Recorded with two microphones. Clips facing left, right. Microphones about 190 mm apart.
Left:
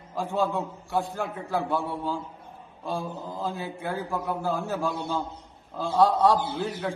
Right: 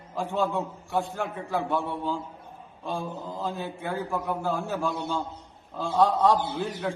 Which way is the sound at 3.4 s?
10° left (ahead or behind).